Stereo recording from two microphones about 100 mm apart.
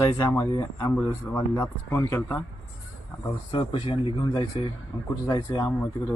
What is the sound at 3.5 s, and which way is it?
Speech, 50° left (ahead or behind).